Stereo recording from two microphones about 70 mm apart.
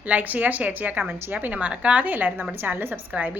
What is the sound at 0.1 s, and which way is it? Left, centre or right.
A woman's voice, right.